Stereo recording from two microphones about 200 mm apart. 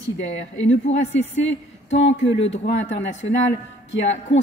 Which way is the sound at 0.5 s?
70° left (ahead or behind).